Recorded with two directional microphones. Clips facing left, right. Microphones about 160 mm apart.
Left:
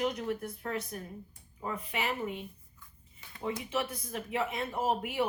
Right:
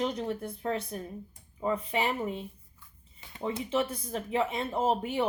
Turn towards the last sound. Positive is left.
turn(degrees=-25)  # may be behind; listen again after turning